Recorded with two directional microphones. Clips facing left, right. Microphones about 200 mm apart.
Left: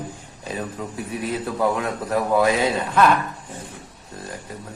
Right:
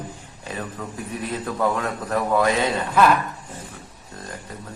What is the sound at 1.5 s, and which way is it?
A man's voice, 5° left (ahead or behind).